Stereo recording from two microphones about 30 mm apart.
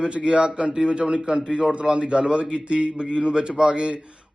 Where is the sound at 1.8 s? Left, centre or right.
Right.